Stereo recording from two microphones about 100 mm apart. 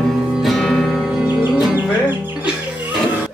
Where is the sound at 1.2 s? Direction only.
20° right (ahead or behind).